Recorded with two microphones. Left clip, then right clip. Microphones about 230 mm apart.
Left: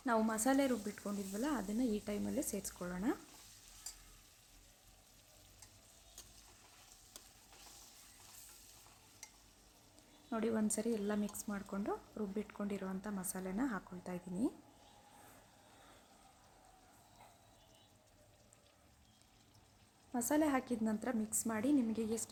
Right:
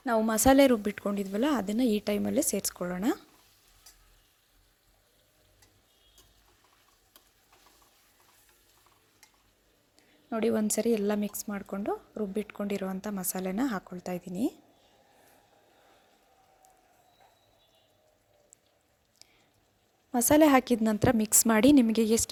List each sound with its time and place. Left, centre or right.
0.3 s speech: right
10.2 s speech: right
20.1 s speech: right